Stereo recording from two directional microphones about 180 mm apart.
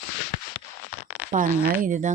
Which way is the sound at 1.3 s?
45° right (ahead or behind).